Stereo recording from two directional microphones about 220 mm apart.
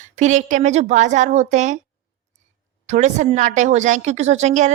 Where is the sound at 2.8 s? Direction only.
30° right (ahead or behind).